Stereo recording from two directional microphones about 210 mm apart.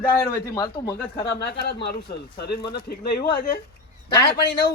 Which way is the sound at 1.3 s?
50° left (ahead or behind).